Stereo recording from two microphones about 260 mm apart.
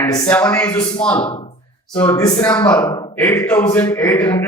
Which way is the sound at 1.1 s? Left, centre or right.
Centre.